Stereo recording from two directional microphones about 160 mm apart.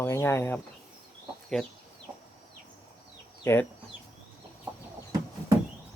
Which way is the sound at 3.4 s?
15° left (ahead or behind).